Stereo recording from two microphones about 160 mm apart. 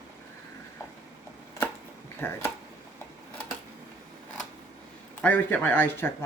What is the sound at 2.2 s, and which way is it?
Speech, 15° left (ahead or behind).